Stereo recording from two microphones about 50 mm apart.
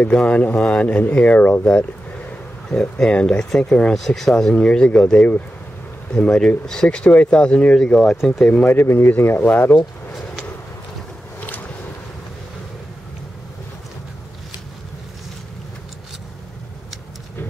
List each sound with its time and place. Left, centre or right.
0.1 s speech: centre
2.7 s speech: centre
3.1 s speech: centre
4.7 s speech: centre
6.1 s speech: centre
8.5 s speech: left
8.7 s speech: left
11.4 s a sound: left